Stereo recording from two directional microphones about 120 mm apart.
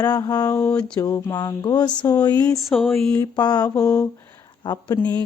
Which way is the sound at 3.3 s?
35° left (ahead or behind).